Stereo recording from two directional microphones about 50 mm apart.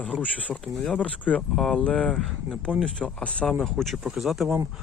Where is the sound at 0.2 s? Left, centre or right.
Left.